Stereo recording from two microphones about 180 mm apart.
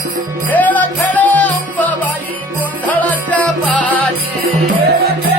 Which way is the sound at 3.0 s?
10° left (ahead or behind).